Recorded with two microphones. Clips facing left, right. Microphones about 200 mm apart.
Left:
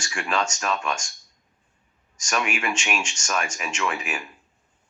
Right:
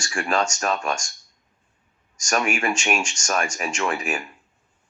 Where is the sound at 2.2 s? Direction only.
45° right (ahead or behind).